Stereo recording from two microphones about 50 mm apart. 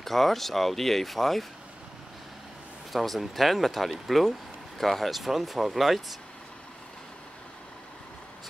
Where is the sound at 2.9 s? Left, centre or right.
Centre.